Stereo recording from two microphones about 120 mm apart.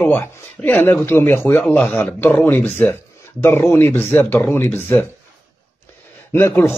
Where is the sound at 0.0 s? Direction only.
15° left (ahead or behind).